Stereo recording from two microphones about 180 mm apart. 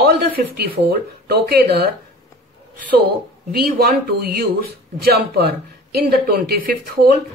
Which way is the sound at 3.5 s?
55° right (ahead or behind).